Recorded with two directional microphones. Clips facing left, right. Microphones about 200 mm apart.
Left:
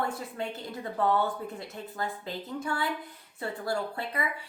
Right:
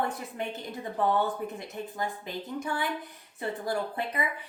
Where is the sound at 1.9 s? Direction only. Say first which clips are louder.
Left 1 dB; 15° right (ahead or behind).